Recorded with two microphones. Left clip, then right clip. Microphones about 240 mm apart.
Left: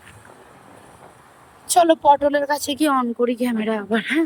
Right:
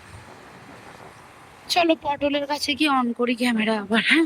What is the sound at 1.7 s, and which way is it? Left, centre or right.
Speech, left.